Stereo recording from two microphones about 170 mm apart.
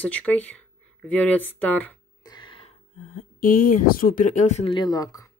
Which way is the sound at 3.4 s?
55° left (ahead or behind).